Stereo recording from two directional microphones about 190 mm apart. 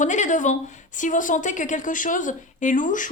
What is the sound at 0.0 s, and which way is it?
A woman's voice, 40° left (ahead or behind).